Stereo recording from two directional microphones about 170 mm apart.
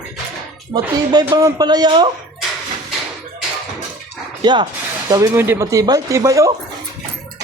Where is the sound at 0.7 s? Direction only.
25° right (ahead or behind).